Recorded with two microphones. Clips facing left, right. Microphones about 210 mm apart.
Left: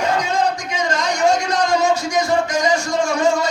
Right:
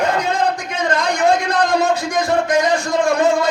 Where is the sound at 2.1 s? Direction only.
55° right (ahead or behind).